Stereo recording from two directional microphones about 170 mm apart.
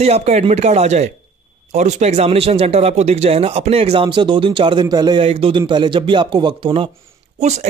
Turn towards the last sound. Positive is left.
turn(degrees=-40)  # may be behind; listen again after turning